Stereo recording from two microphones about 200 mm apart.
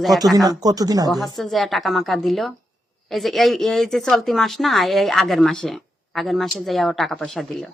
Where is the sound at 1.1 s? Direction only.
Centre (ahead or behind).